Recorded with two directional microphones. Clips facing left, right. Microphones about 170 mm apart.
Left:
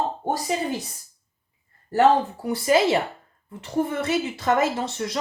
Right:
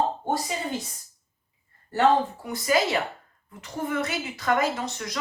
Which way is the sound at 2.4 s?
30° left (ahead or behind).